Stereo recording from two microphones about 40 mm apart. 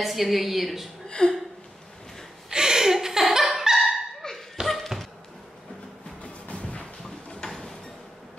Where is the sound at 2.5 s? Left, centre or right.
Centre.